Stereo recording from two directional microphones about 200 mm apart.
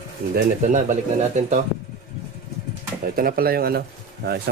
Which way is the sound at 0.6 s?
40° right (ahead or behind).